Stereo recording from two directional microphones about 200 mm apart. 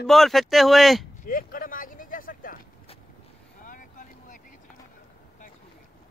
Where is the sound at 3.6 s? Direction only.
40° left (ahead or behind).